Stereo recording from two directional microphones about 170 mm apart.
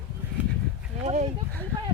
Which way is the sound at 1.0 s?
40° right (ahead or behind).